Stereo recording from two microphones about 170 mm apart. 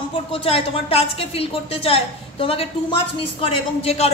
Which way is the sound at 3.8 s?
35° left (ahead or behind).